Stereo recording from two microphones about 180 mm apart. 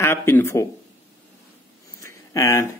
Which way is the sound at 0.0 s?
15° left (ahead or behind).